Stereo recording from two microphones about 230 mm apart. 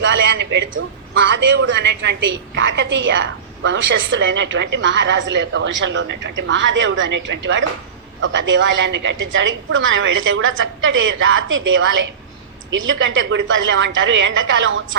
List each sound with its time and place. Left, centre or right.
0.0 s a man's voice: right